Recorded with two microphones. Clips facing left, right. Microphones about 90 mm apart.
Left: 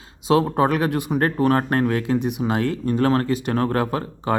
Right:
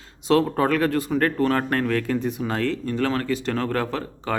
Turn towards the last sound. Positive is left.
turn(degrees=25)  # may be behind; listen again after turning